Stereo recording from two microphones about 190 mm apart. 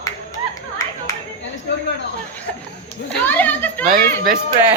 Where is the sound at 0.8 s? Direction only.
15° left (ahead or behind).